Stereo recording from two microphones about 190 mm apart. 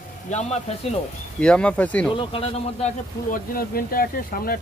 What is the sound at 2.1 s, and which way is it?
Speech, 30° left (ahead or behind).